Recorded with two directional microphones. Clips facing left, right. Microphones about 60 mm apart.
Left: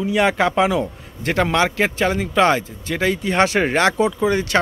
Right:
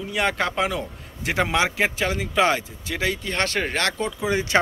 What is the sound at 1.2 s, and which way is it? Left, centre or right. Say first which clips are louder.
Speech: left 4 dB; centre.